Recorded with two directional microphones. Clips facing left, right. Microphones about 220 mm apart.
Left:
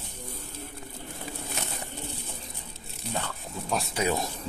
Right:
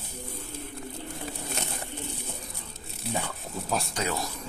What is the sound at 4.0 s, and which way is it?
Speech, 20° left (ahead or behind).